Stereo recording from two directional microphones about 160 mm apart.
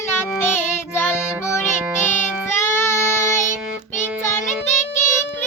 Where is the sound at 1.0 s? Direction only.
15° left (ahead or behind).